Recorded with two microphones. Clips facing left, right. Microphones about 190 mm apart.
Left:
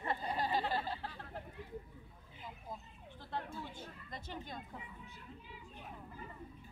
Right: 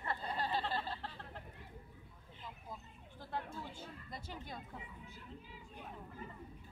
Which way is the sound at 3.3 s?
10° right (ahead or behind).